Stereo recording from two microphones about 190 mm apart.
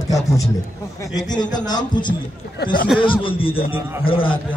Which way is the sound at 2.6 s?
55° left (ahead or behind).